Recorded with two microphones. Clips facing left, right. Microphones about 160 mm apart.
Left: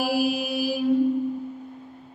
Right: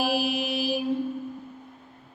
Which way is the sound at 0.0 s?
25° right (ahead or behind).